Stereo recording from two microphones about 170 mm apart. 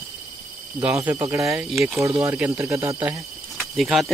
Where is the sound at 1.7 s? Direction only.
Centre (ahead or behind).